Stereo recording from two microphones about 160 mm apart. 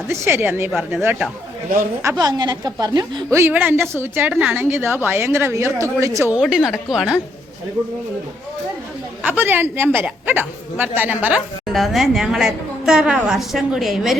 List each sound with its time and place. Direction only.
0.1 s a woman's voice: 15° right (ahead or behind)
2.0 s a woman's voice: 25° right (ahead or behind)
3.3 s a woman's voice: 15° right (ahead or behind)
6.4 s speech: centre (ahead or behind)
9.2 s speech: 10° right (ahead or behind)